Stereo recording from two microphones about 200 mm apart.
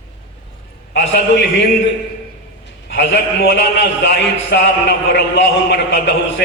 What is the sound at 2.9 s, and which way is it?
A man's voice, 65° left (ahead or behind).